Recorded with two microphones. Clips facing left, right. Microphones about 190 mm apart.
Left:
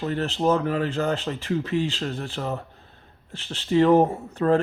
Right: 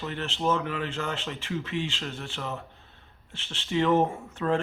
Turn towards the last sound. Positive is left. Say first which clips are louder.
# left 6 dB
turn(degrees=40)  # may be behind; listen again after turning